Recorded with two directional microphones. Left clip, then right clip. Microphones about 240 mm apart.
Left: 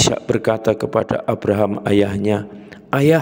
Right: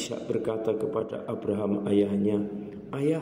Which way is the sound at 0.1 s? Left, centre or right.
Left.